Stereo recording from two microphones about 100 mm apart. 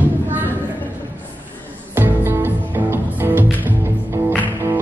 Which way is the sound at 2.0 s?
25° right (ahead or behind).